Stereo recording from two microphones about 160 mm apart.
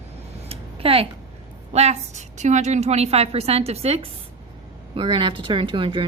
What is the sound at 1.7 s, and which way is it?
Speech, 40° right (ahead or behind).